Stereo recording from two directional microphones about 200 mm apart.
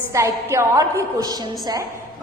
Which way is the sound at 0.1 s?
15° right (ahead or behind).